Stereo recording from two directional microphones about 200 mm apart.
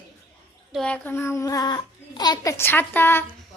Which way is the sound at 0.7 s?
5° left (ahead or behind).